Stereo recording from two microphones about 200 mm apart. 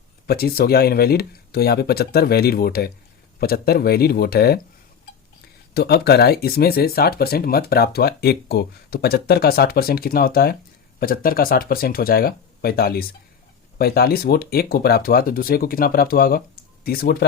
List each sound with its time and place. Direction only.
0.3 s speech: 50° left (ahead or behind)
5.7 s speech: 55° left (ahead or behind)